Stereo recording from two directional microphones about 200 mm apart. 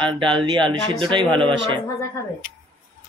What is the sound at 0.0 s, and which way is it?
Speech, 25° right (ahead or behind).